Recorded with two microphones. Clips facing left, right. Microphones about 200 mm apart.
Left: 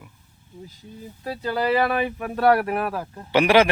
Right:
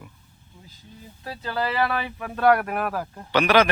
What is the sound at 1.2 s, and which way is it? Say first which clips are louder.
Speech: left 3 dB; 15° left (ahead or behind).